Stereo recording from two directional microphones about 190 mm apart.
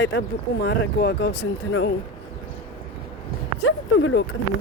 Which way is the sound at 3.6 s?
85° left.